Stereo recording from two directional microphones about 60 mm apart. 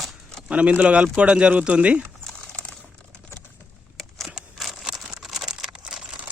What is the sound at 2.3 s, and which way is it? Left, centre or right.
Typing, centre.